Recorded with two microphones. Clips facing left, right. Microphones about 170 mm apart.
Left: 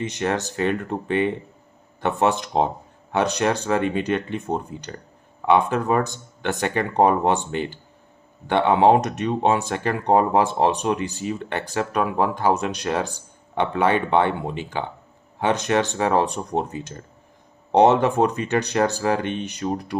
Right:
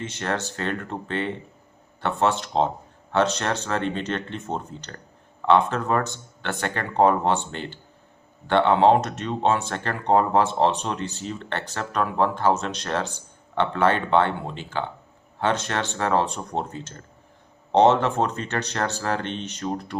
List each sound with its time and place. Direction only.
0.0 s speech: 15° left (ahead or behind)